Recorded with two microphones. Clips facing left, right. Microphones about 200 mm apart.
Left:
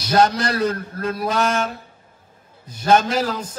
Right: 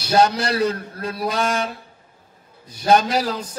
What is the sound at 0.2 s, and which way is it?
A man's voice, 50° left (ahead or behind).